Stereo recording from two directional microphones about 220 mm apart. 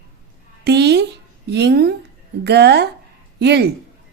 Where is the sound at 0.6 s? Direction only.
50° right (ahead or behind).